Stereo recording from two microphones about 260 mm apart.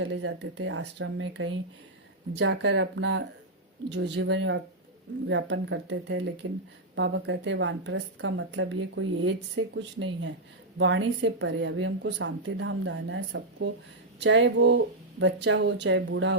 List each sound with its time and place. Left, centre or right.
0.0 s a woman's voice: right